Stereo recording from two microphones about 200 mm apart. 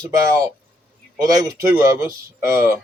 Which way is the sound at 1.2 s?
15° right (ahead or behind).